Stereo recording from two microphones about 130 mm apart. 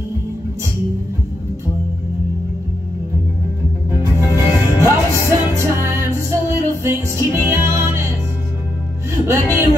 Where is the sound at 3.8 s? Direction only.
20° right (ahead or behind).